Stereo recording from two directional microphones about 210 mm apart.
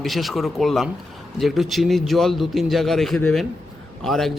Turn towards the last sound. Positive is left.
turn(degrees=0)  # may be behind; listen again after turning